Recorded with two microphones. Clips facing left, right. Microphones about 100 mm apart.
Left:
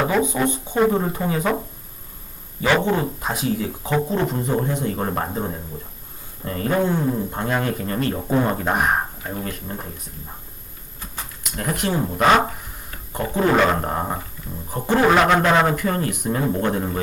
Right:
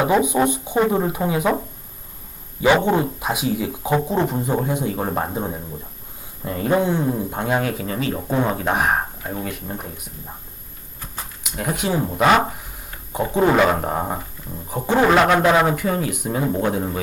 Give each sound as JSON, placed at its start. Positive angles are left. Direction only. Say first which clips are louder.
{"t": 0.0, "sound": "speech", "louder": "right 3 dB", "side_deg": -15}
{"t": 2.6, "sound": "speech", "louder": "right 3 dB", "side_deg": -15}
{"t": 11.5, "sound": "speech", "louder": "right 1 dB", "side_deg": -5}
{"t": 13.5, "sound": "speech", "louder": "right 1 dB", "side_deg": -5}